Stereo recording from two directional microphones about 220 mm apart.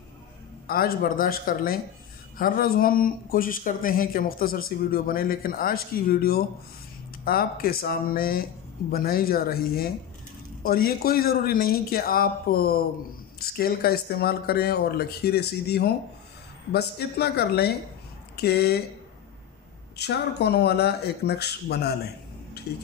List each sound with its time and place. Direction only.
0.7 s speech: 45° left (ahead or behind)
20.0 s speech: 50° left (ahead or behind)